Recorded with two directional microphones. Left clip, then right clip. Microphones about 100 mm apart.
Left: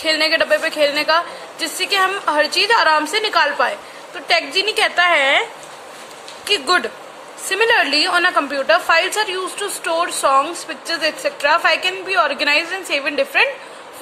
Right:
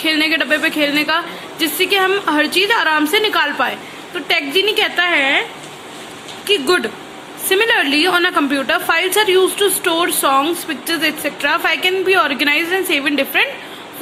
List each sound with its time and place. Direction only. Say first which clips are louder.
0.0 s a woman's voice: even; 30° left (ahead or behind)
4.9 s a woman's voice: left 3 dB; 50° left (ahead or behind)
6.5 s a woman's voice: right 1 dB; 30° left (ahead or behind)